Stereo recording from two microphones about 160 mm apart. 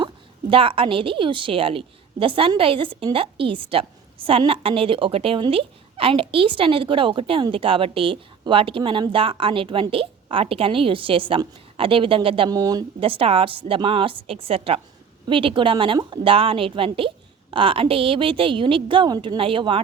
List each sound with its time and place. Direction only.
0.5 s a woman's voice: 35° right (ahead or behind)